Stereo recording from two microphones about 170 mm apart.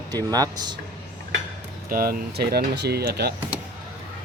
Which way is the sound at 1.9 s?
60° right (ahead or behind).